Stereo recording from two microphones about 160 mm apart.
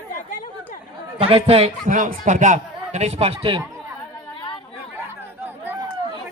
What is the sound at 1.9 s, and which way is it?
Speech, 55° right (ahead or behind).